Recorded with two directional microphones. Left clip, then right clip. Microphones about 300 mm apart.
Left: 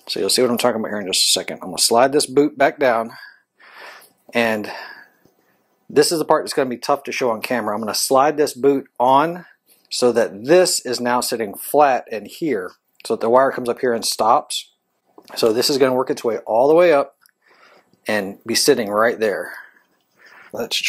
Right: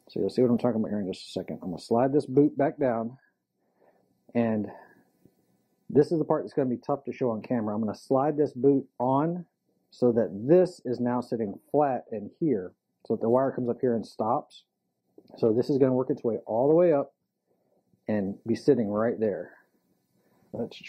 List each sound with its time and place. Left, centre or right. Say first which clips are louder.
0.0 s speech: left 8 dB; centre
3.8 s a sound: left 18 dB; centre
6.0 s speech: left 10 dB; centre
11.0 s speech: left 9 dB; centre
13.7 s speech: left 8 dB; centre
14.0 s speech: left 12 dB; centre
15.5 s speech: left 7 dB; centre
16.4 s speech: left 10 dB; left
16.7 s speech: left 8 dB; centre
18.5 s speech: left 8 dB; centre